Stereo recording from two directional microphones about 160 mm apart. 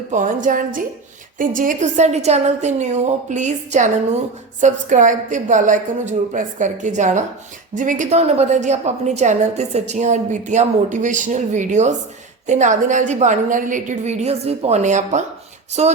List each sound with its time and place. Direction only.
0.1 s a woman's voice: 50° right (ahead or behind)